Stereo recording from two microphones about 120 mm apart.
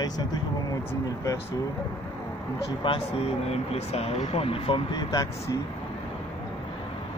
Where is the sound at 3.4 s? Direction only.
60° left (ahead or behind).